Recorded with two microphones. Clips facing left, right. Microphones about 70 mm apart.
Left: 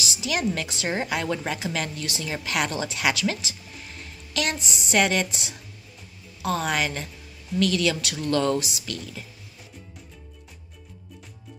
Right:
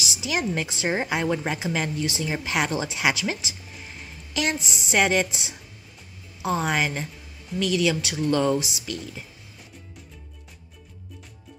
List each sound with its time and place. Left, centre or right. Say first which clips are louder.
0.0 s speech: left 1 dB; centre